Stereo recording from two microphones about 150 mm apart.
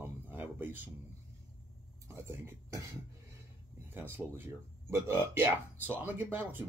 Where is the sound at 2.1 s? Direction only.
15° right (ahead or behind).